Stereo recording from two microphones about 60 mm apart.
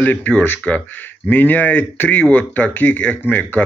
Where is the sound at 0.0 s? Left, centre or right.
Left.